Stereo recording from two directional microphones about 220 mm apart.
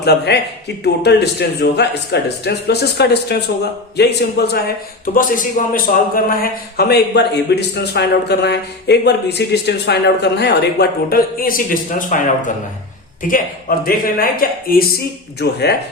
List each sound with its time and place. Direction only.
0.0 s a man's voice: 45° left (ahead or behind)
13.2 s a man's voice: 40° left (ahead or behind)